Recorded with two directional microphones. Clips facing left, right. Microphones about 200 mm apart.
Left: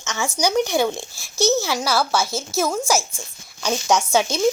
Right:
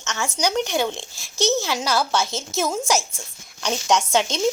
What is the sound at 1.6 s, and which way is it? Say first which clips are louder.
Speech: left 2 dB; 10° left (ahead or behind).